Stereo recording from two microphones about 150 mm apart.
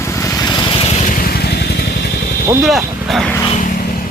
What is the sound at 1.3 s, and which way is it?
Vehicle, 90° left.